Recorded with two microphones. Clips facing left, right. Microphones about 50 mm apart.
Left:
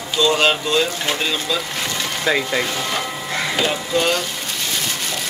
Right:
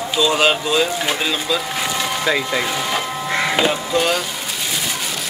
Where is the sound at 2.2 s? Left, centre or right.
Centre.